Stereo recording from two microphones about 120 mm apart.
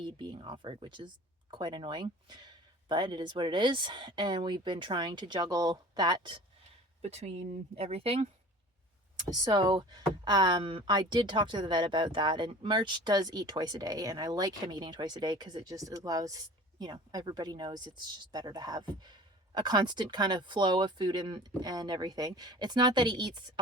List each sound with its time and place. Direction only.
0.0 s speech: 40° right (ahead or behind)
7.0 s speech: 65° right (ahead or behind)
9.3 s speech: 35° right (ahead or behind)